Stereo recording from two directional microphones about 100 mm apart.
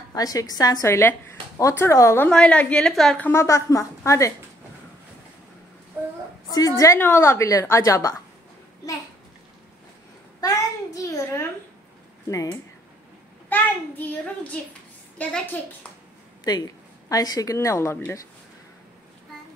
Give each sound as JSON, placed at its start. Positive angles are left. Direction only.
{"t": 0.1, "sound": "a woman's voice", "side_deg": 40}
{"t": 0.8, "sound": "a woman's voice", "side_deg": 25}
{"t": 2.2, "sound": "a child's voice", "side_deg": 10}
{"t": 3.2, "sound": "a woman's voice", "side_deg": 25}
{"t": 6.0, "sound": "a sound", "side_deg": -25}
{"t": 7.0, "sound": "a woman's voice", "side_deg": 25}
{"t": 10.4, "sound": "a sound", "side_deg": 35}
{"t": 12.3, "sound": "a woman's voice", "side_deg": 35}
{"t": 13.5, "sound": "a child's voice", "side_deg": 15}
{"t": 17.1, "sound": "a woman's voice", "side_deg": 35}